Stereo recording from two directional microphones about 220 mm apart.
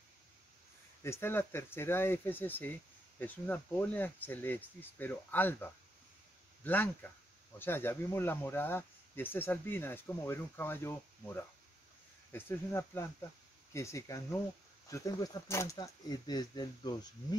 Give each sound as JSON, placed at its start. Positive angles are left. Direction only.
{"t": 1.0, "sound": "speech", "side_deg": 10}